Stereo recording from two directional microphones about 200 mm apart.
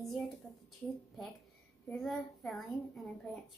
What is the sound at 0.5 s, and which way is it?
Speech, 10° left (ahead or behind).